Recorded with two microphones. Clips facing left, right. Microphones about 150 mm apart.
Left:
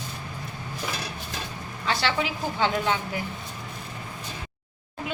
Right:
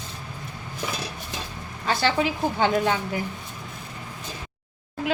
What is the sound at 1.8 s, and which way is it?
A woman's voice, 45° right (ahead or behind).